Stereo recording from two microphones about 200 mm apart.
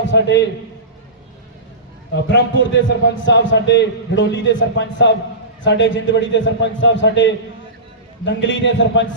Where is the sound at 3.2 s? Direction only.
65° left (ahead or behind).